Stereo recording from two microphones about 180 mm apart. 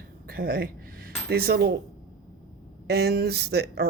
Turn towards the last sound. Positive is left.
turn(degrees=-65)  # may be behind; listen again after turning